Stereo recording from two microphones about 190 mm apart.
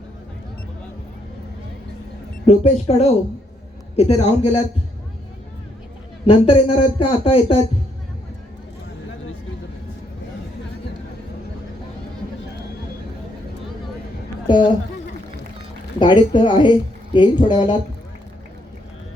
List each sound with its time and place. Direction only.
2.5 s speech: 35° left (ahead or behind)
6.2 s speech: 30° left (ahead or behind)
14.4 s a woman's voice: 25° left (ahead or behind)
16.0 s speech: 25° left (ahead or behind)